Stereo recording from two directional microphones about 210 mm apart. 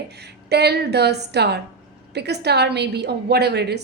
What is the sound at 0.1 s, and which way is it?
A woman's voice, 50° right (ahead or behind).